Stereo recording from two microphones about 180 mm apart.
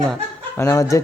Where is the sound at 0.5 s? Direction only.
15° left (ahead or behind).